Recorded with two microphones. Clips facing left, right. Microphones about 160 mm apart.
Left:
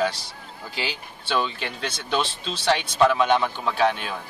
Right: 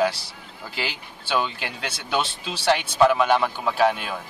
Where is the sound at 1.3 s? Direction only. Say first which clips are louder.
Right 1 dB; 5° right (ahead or behind).